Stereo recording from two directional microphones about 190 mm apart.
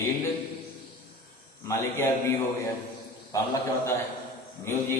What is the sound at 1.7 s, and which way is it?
Speech, 15° left (ahead or behind).